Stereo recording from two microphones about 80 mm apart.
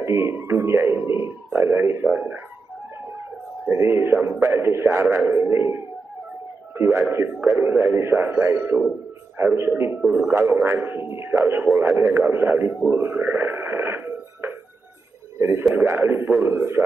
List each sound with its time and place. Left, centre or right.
0.0 s a man's voice: right
3.6 s a man's voice: right
10.0 s a man's voice: centre
10.3 s a man's voice: right